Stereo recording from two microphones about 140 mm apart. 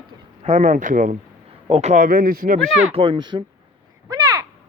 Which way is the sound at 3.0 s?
35° right (ahead or behind).